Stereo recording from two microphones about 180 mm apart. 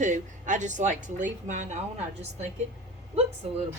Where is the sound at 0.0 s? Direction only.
45° right (ahead or behind).